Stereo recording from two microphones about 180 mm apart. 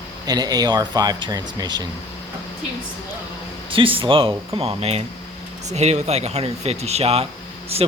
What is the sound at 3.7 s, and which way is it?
Speech, 30° right (ahead or behind).